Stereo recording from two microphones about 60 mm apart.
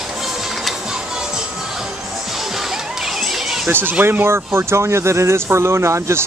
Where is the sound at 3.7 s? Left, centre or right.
Right.